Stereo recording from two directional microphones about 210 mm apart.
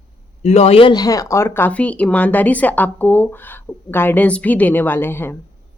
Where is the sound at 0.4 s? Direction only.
30° left (ahead or behind).